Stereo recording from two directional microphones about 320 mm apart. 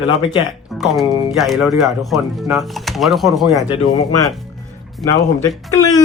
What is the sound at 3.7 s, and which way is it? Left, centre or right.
Speech, centre.